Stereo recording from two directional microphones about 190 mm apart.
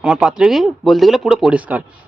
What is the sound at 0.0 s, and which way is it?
Speech, 5° right (ahead or behind).